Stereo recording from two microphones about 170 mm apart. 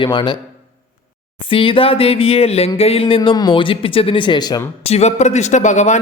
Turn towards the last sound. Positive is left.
turn(degrees=45)  # may be behind; listen again after turning